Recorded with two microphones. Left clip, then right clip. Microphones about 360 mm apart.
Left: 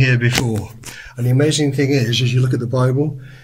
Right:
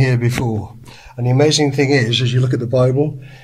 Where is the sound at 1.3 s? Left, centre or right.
Centre.